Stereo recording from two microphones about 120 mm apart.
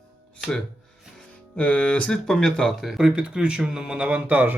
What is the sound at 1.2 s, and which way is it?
Speech, 10° left (ahead or behind).